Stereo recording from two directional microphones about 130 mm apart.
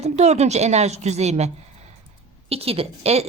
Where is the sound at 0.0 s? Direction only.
55° right (ahead or behind).